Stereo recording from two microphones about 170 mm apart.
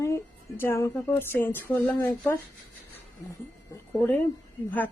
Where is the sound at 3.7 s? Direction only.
10° left (ahead or behind).